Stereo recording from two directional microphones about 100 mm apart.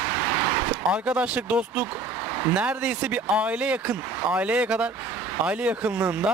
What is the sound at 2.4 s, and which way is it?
Speech, 15° right (ahead or behind).